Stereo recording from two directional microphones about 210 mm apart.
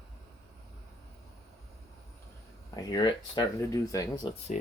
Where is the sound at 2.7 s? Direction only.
20° left (ahead or behind).